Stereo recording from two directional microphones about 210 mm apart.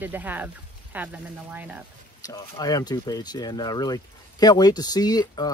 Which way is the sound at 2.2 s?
15° left (ahead or behind).